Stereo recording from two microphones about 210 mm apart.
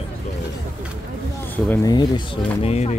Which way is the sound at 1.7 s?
15° left (ahead or behind).